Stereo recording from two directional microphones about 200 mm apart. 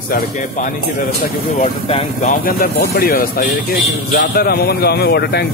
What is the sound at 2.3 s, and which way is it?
Speech, 50° left (ahead or behind).